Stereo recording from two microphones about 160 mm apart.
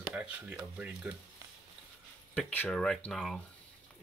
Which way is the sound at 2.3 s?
10° left (ahead or behind).